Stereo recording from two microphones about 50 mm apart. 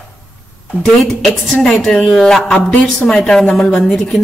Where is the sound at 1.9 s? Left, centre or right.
Centre.